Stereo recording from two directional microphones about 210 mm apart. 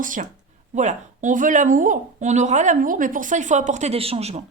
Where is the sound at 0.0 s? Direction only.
40° right (ahead or behind).